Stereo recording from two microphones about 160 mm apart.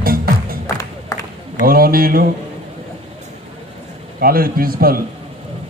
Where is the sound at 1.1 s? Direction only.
20° left (ahead or behind).